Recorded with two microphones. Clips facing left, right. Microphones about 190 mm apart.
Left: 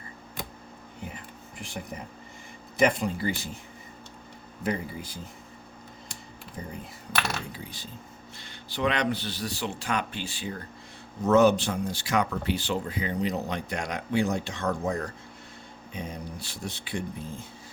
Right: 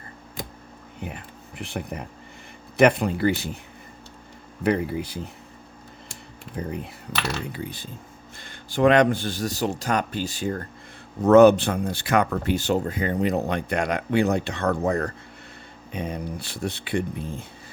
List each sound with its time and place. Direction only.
1.0 s speech: 65° right (ahead or behind)
4.6 s speech: 65° right (ahead or behind)
6.6 s speech: 70° right (ahead or behind); by 10.6 s 45° right (ahead or behind)
11.2 s speech: 60° right (ahead or behind)